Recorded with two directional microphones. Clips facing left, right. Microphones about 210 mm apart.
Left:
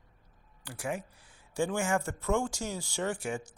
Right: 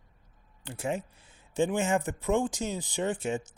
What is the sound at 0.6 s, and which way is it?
Speech, 25° right (ahead or behind).